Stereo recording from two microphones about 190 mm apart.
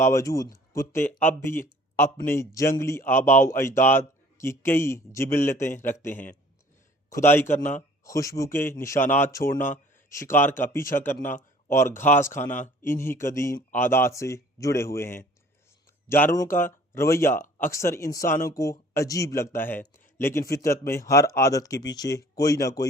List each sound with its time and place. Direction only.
0.0 s speech: 15° left (ahead or behind)